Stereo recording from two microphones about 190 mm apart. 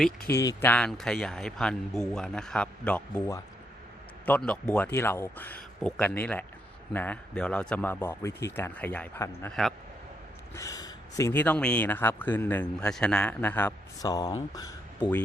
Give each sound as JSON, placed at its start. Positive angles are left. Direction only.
{"t": 0.3, "sound": "speech", "side_deg": 15}
{"t": 4.3, "sound": "speech", "side_deg": 5}
{"t": 10.5, "sound": "speech", "side_deg": 15}
{"t": 14.0, "sound": "speech", "side_deg": 20}